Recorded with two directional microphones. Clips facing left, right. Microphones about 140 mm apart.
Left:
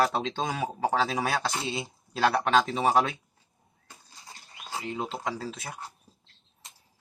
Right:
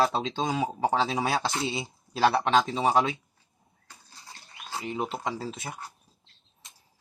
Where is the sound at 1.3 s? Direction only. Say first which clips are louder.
Right 2 dB; centre (ahead or behind).